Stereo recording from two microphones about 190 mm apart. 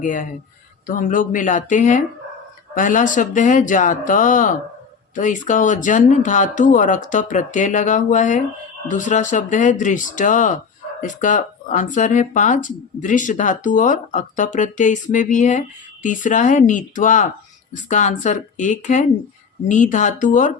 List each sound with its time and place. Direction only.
0.0 s speech: 45° left (ahead or behind)